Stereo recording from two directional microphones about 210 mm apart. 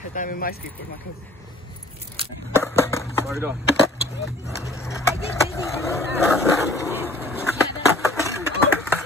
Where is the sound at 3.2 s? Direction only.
10° right (ahead or behind).